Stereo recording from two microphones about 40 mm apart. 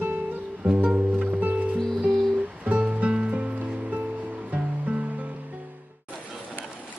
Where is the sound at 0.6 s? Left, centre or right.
Right.